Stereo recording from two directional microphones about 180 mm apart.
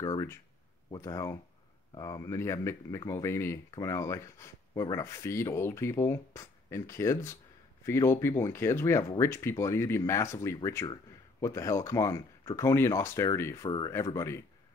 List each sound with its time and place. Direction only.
0.0 s speech: 20° left (ahead or behind)